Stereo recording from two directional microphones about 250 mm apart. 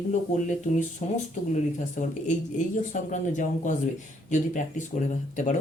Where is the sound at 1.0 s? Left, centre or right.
Left.